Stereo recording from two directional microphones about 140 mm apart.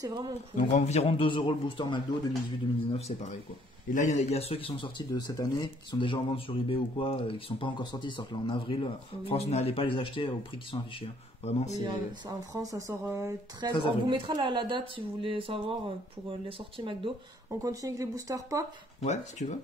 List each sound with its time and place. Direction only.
0.0 s speech: 30° right (ahead or behind)
0.6 s speech: 55° left (ahead or behind); by 2.0 s 35° left (ahead or behind)
3.9 s speech: 60° left (ahead or behind); by 11.5 s 40° left (ahead or behind)
11.8 s speech: 35° right (ahead or behind)
12.5 s speech: 20° right (ahead or behind)
13.6 s speech: 35° right (ahead or behind)
17.6 s speech: 25° right (ahead or behind)
19.0 s speech: 55° left (ahead or behind)